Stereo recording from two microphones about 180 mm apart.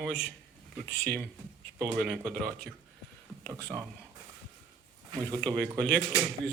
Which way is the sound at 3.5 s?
15° right (ahead or behind).